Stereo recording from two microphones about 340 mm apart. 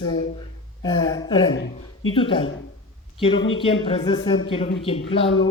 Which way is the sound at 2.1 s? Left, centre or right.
Centre.